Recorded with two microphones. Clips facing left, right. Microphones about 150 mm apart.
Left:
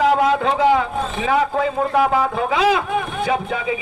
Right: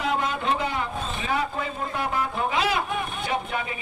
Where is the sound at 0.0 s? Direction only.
90° left.